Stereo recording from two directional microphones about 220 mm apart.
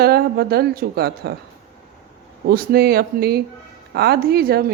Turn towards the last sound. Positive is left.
turn(degrees=-45)  # may be behind; listen again after turning